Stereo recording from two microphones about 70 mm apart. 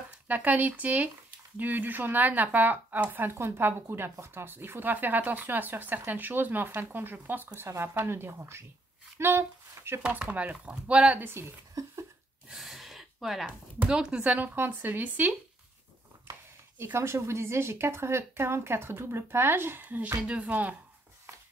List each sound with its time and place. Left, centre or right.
0.3 s speech: right
10.0 s speech: right
11.1 s speech: right
11.7 s a sound: right
12.4 s gasp: centre
13.8 s speech: centre